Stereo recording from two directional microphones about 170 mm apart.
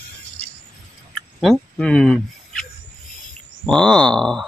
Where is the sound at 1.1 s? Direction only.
Centre (ahead or behind).